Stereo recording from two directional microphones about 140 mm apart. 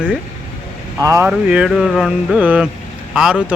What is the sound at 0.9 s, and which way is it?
Speech, 20° right (ahead or behind).